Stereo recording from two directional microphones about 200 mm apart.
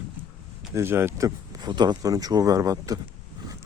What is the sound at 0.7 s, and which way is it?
Speech, 10° right (ahead or behind).